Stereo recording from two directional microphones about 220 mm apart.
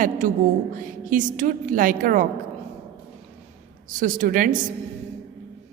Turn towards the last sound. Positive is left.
turn(degrees=-35)  # may be behind; listen again after turning